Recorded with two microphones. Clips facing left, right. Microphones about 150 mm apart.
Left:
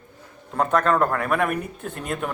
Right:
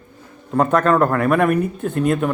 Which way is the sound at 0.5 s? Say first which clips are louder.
Right 5 dB; 5° right (ahead or behind).